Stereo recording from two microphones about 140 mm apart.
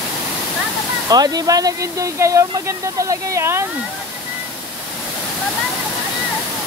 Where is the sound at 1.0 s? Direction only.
25° right (ahead or behind).